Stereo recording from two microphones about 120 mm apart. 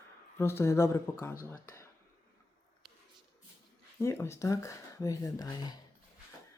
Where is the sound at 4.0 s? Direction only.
25° left (ahead or behind).